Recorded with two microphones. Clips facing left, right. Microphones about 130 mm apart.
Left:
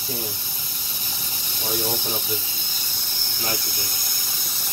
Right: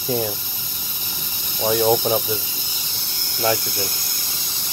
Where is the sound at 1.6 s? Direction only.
90° right.